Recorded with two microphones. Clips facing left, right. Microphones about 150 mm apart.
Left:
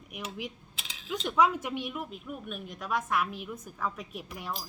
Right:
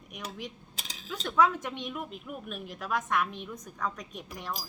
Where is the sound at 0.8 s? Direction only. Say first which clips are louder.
Right 1 dB; 40° right (ahead or behind).